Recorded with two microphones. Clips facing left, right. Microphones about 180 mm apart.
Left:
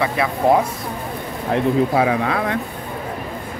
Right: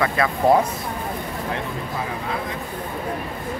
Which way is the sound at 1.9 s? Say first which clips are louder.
Left 9 dB; 80° left.